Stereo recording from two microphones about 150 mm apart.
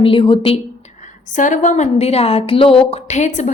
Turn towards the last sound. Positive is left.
turn(degrees=55)  # may be behind; listen again after turning